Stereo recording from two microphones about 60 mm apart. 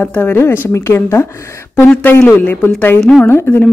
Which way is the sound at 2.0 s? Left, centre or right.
Left.